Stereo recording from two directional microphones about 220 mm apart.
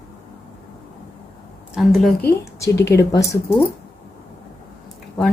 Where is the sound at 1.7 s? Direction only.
Centre (ahead or behind).